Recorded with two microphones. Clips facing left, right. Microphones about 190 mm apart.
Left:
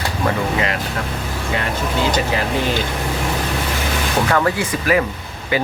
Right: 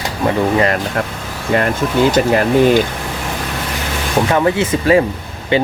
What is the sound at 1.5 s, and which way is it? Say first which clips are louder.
Speech: right 9 dB; 55° right (ahead or behind).